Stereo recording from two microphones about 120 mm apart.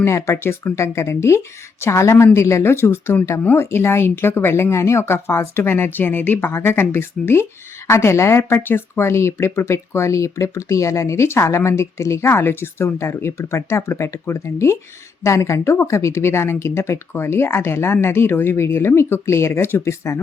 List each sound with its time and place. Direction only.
0.0 s speech: 25° left (ahead or behind)